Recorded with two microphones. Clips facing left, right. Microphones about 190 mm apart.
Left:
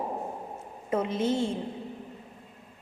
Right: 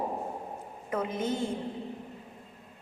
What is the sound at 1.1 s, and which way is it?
Speech, 90° left.